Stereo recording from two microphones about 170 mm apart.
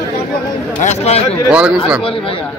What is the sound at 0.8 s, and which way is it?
Speech, 40° left (ahead or behind).